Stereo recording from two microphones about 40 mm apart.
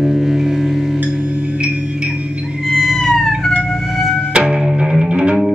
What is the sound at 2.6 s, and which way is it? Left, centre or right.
Whale vocalization, centre.